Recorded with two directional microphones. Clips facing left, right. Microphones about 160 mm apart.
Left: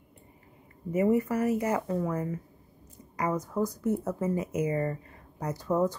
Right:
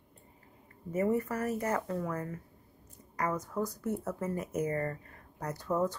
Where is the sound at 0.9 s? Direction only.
15° left (ahead or behind).